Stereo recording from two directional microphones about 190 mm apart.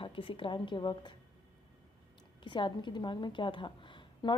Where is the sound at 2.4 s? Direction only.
25° left (ahead or behind).